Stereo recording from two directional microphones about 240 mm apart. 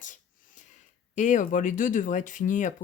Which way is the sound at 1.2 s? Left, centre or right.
Left.